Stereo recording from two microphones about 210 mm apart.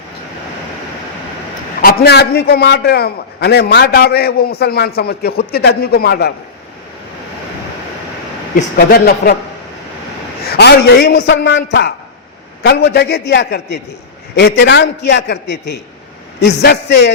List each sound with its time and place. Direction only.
1.8 s a man's voice: 45° left (ahead or behind)
8.9 s a man's voice: 50° left (ahead or behind)
10.4 s a man's voice: 50° left (ahead or behind)